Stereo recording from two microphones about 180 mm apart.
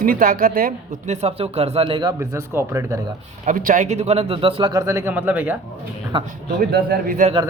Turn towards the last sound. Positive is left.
turn(degrees=-55)  # may be behind; listen again after turning